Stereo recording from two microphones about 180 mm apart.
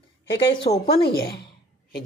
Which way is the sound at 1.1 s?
60° left (ahead or behind).